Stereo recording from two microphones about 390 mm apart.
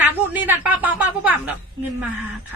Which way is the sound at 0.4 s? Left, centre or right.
Centre.